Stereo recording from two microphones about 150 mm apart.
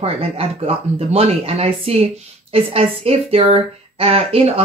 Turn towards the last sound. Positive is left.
turn(degrees=-40)  # may be behind; listen again after turning